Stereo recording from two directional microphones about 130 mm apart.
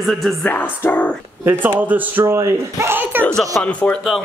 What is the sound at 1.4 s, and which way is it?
Speech, 15° right (ahead or behind).